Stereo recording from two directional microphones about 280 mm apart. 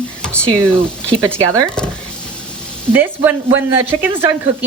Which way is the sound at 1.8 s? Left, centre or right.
Centre.